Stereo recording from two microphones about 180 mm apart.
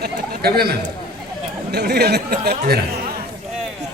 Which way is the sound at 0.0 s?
60° right (ahead or behind).